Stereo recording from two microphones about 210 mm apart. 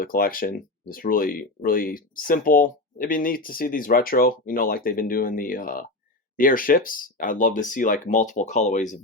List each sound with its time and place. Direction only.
0.0 s speech: 45° left (ahead or behind)